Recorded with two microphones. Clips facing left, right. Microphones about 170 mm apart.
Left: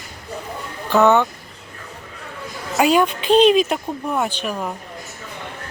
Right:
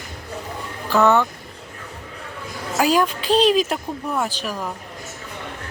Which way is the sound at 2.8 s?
Centre (ahead or behind).